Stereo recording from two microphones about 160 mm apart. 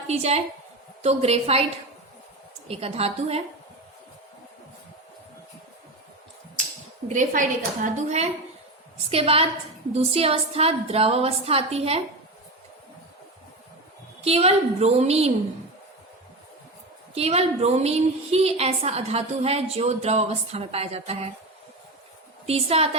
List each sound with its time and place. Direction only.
0.1 s a woman's voice: 40° right (ahead or behind)
2.6 s a woman's voice: 40° right (ahead or behind)
7.1 s a woman's voice: 50° right (ahead or behind)
14.2 s a woman's voice: 40° right (ahead or behind)
17.2 s a woman's voice: 40° right (ahead or behind)
22.4 s a woman's voice: 40° right (ahead or behind)